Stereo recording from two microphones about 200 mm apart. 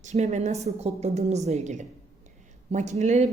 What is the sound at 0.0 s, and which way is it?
A woman's voice, 35° right (ahead or behind).